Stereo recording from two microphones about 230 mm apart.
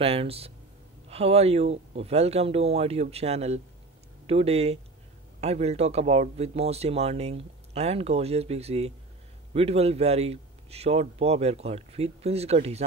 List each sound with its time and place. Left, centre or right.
0.0 s speech: right